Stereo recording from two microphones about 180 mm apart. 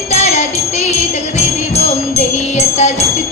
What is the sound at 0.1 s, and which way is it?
Music, 35° left (ahead or behind).